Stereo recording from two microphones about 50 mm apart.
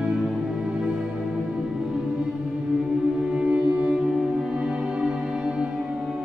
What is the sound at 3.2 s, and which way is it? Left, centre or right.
Music, right.